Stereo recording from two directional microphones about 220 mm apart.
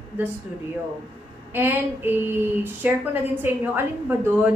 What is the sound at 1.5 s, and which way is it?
A woman's voice, 10° right (ahead or behind).